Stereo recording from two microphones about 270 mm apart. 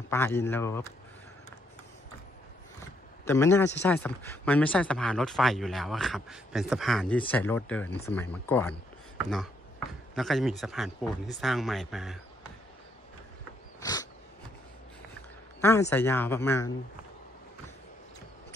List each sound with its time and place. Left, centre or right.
0.1 s speech: centre
3.3 s speech: centre
10.1 s speech: centre
13.7 s a sound: centre
15.6 s speech: centre